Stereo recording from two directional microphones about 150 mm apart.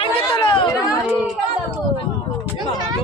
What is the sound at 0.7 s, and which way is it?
Speech, 20° left (ahead or behind).